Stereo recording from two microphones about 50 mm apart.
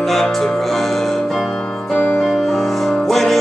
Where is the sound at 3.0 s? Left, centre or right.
Centre.